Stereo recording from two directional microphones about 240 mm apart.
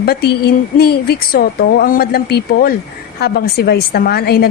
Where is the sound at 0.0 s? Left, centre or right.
Left.